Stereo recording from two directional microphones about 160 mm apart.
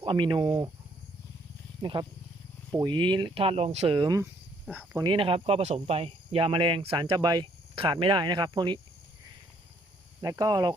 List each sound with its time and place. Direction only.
0.0 s speech: 30° right (ahead or behind)
1.8 s speech: 30° right (ahead or behind)
10.2 s speech: 25° right (ahead or behind)